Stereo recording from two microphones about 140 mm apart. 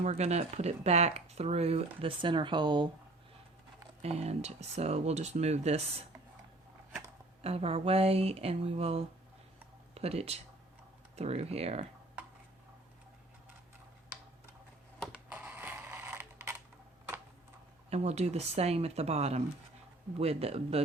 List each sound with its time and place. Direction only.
0.0 s speech: 50° right (ahead or behind); by 2.9 s 35° right (ahead or behind)
4.0 s speech: 50° right (ahead or behind)
7.4 s speech: 45° right (ahead or behind)
15.0 s a sound: 10° right (ahead or behind)
17.8 s speech: 50° right (ahead or behind)